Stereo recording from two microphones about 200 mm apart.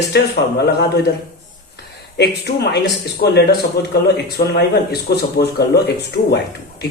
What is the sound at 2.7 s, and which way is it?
Speech, 55° left (ahead or behind).